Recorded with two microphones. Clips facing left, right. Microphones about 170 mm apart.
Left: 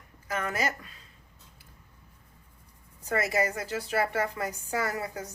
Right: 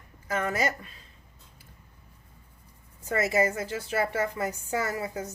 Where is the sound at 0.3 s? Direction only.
25° right (ahead or behind).